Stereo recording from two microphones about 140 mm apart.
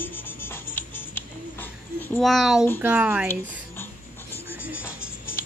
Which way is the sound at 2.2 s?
Centre (ahead or behind).